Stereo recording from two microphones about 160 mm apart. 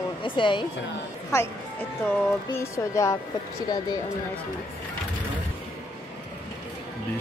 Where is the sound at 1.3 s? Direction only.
20° left (ahead or behind).